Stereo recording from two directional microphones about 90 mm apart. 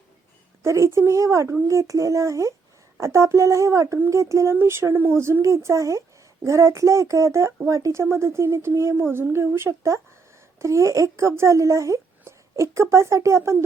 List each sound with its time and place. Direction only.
0.6 s speech: 30° right (ahead or behind)